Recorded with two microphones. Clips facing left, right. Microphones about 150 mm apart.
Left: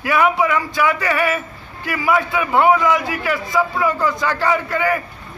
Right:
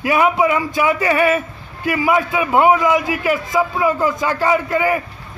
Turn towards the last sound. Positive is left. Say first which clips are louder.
# right 2 dB
turn(degrees=-20)  # may be behind; listen again after turning